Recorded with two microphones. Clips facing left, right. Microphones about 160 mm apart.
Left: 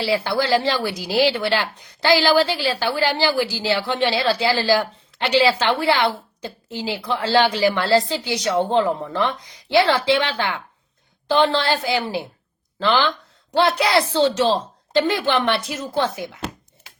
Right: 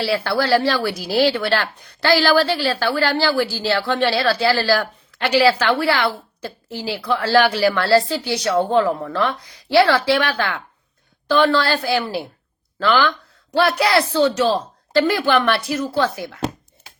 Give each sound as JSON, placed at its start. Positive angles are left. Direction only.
{"t": 0.0, "sound": "a woman's voice", "side_deg": 15}